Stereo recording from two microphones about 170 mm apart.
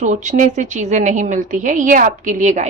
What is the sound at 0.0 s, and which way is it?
A woman's voice, 45° right (ahead or behind).